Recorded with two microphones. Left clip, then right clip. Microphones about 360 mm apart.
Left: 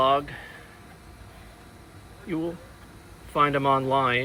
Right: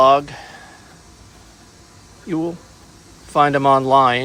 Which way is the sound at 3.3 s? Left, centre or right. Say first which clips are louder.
Right 8 dB; centre.